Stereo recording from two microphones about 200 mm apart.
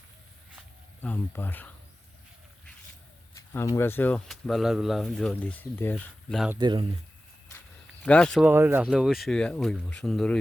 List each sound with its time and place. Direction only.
1.0 s speech: 10° left (ahead or behind)
3.3 s speech: 15° left (ahead or behind)
6.6 s speech: 25° right (ahead or behind)
8.0 s speech: 5° left (ahead or behind)
8.4 s speech: 10° right (ahead or behind)